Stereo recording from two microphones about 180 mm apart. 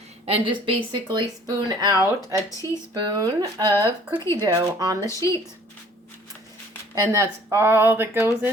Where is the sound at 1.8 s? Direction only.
20° right (ahead or behind).